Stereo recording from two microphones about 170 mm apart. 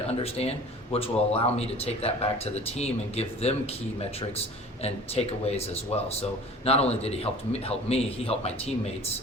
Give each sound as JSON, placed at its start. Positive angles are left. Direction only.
{"t": 0.1, "sound": "speech", "side_deg": 35}
{"t": 4.8, "sound": "speech", "side_deg": 35}